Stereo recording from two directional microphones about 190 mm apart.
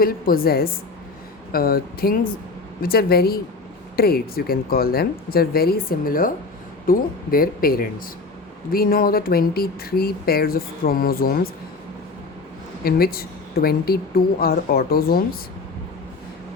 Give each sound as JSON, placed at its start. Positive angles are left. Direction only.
{"t": 0.0, "sound": "speech", "side_deg": 50}
{"t": 12.8, "sound": "speech", "side_deg": 50}